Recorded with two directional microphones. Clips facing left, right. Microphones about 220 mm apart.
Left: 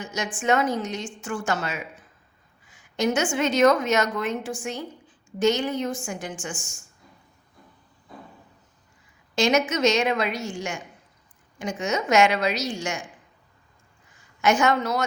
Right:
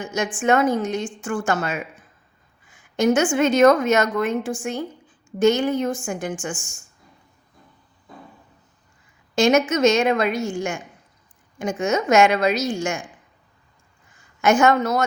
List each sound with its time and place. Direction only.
0.0 s a woman's voice: 50° right (ahead or behind)
9.3 s a woman's voice: 50° right (ahead or behind)
14.4 s a woman's voice: 50° right (ahead or behind)